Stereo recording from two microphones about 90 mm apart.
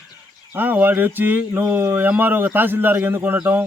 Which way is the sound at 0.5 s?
20° right (ahead or behind).